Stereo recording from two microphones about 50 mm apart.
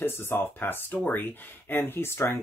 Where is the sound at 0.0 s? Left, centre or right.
Left.